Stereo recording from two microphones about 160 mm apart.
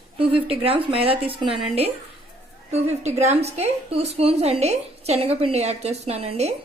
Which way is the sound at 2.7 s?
45° right (ahead or behind).